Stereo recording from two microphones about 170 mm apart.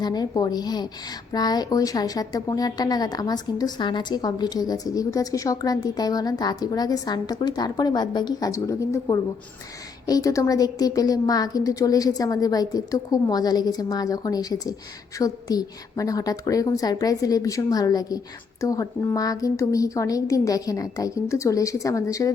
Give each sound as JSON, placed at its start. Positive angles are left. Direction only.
{"t": 0.0, "sound": "a woman's voice", "side_deg": 25}